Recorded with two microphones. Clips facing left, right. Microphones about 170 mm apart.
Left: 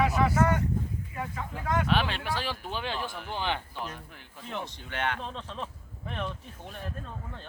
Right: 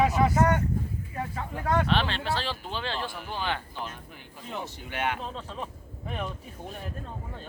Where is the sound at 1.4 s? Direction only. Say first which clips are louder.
Right 3 dB; 35° right (ahead or behind).